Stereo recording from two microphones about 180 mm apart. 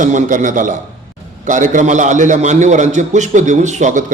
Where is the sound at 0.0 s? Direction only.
45° right (ahead or behind).